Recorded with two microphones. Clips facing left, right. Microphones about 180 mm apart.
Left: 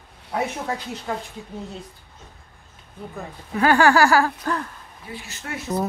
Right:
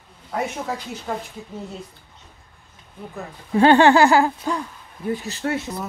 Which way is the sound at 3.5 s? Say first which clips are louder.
Right 4 dB; 25° right (ahead or behind).